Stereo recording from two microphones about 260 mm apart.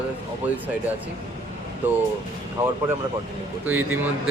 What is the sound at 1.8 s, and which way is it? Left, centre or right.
Speech, centre.